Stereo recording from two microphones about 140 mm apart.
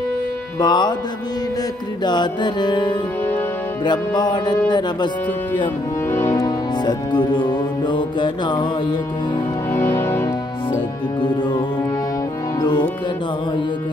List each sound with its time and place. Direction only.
0.6 s speech: 30° left (ahead or behind)
2.0 s speech: 30° left (ahead or behind)
6.1 s music: 20° left (ahead or behind)
9.7 s music: 15° left (ahead or behind)
11.1 s speech: 35° left (ahead or behind)
12.5 s music: 30° left (ahead or behind)